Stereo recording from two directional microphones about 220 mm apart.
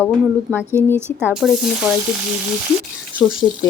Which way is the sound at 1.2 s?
Centre (ahead or behind).